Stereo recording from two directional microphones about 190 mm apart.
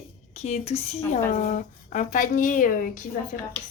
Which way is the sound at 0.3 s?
35° left (ahead or behind).